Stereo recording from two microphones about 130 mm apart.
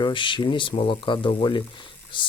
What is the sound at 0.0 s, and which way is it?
Speech, 40° left (ahead or behind).